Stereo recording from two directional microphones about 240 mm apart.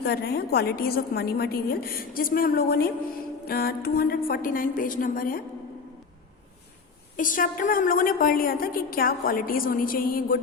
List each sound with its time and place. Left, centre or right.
0.0 s a woman's voice: left
7.2 s a woman's voice: left